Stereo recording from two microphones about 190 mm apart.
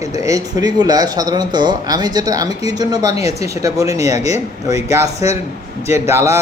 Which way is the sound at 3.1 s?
35° left (ahead or behind).